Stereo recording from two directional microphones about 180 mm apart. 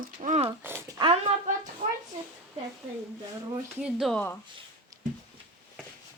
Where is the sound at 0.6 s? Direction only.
10° right (ahead or behind).